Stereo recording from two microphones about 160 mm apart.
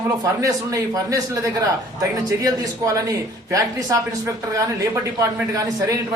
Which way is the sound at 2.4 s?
20° right (ahead or behind).